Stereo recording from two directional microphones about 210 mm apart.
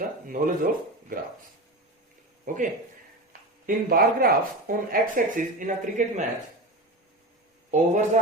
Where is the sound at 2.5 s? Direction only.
40° right (ahead or behind).